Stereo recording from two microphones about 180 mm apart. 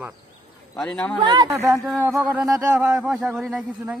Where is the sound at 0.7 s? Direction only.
5° left (ahead or behind).